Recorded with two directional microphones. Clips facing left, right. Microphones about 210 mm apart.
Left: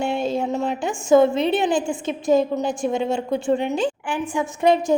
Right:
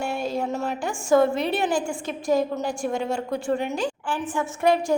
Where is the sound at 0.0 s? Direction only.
20° left (ahead or behind).